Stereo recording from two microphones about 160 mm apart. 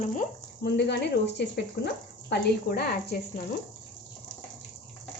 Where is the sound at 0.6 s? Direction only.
90° left.